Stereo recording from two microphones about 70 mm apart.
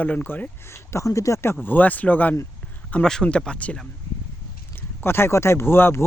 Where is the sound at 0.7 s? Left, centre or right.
Left.